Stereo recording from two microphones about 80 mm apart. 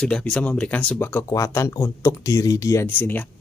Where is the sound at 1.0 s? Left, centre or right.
Left.